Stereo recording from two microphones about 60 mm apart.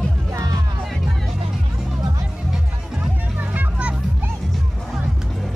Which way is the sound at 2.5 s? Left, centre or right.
Centre.